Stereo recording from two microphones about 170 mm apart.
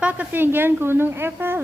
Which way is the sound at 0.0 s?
10° right (ahead or behind).